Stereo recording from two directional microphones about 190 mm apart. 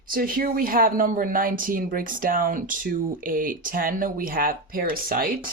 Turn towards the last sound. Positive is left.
turn(degrees=-50)  # may be behind; listen again after turning